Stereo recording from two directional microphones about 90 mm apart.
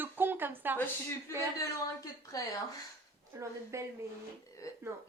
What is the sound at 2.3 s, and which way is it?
Speech, 40° left (ahead or behind).